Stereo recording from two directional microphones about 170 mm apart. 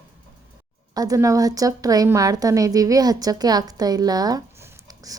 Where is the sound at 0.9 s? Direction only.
20° right (ahead or behind).